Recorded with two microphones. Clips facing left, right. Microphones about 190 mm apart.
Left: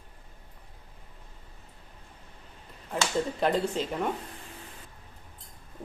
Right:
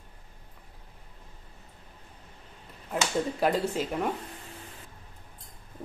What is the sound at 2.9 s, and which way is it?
Speech, 5° right (ahead or behind).